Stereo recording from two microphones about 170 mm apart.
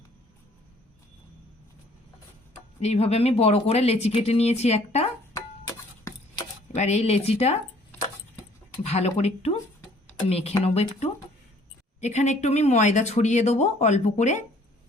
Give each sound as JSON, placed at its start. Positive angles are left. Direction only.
{"t": 2.8, "sound": "speech", "side_deg": 40}
{"t": 6.7, "sound": "speech", "side_deg": 40}
{"t": 8.8, "sound": "speech", "side_deg": 40}